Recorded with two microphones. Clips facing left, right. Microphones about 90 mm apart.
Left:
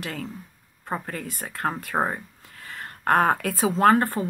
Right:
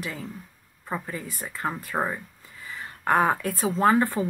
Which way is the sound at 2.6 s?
55° left (ahead or behind).